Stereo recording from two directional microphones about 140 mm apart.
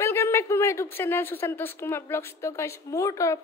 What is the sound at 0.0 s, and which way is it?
A woman's voice, 20° left (ahead or behind).